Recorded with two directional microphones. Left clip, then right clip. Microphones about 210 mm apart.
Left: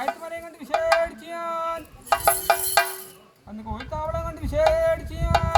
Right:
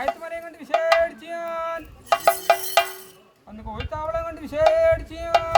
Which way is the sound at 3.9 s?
5° right (ahead or behind).